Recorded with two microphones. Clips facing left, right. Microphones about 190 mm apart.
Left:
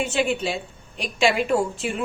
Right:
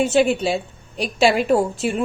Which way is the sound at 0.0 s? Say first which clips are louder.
Right 6 dB; 40° right (ahead or behind).